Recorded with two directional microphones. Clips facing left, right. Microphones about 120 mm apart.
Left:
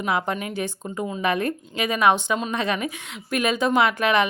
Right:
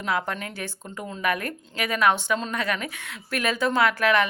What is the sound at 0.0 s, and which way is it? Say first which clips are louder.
A woman's voice: left 3 dB; 20° left (ahead or behind).